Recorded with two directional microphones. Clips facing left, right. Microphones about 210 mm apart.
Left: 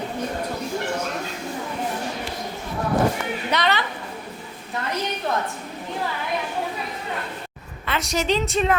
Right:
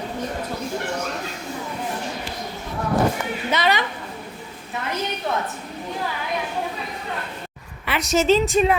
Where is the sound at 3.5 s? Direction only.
5° right (ahead or behind).